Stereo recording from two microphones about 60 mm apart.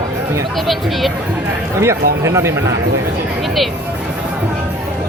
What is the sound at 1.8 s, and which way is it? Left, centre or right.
Speech, right.